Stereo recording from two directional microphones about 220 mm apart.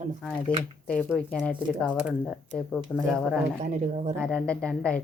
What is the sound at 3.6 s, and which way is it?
Speech, 35° right (ahead or behind).